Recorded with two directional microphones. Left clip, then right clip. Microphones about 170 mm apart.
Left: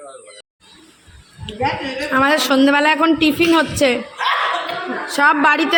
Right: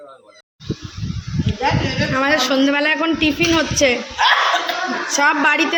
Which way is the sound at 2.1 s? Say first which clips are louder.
Left 3 dB; 20° left (ahead or behind).